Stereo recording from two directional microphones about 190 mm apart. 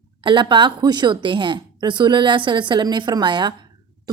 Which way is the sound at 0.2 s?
25° right (ahead or behind).